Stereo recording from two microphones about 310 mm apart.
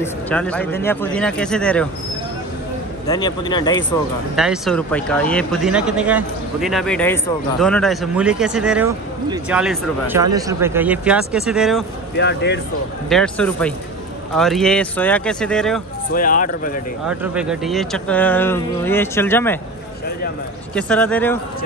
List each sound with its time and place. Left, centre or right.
0.0 s a man's voice: centre
3.1 s a man's voice: centre
4.4 s a man's voice: centre
12.2 s speech: left
13.1 s a man's voice: centre
16.1 s speech: left
17.1 s a man's voice: centre
20.7 s a man's voice: centre